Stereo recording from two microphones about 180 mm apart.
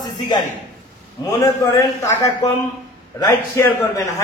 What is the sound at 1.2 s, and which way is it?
Speech, 15° left (ahead or behind).